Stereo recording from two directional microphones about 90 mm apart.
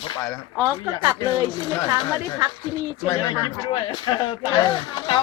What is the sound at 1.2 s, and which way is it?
Speech, 55° left (ahead or behind).